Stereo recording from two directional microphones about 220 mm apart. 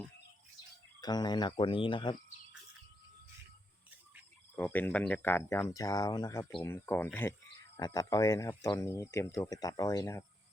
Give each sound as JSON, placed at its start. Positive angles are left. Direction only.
{"t": 1.0, "sound": "speech", "side_deg": 20}
{"t": 4.5, "sound": "speech", "side_deg": 10}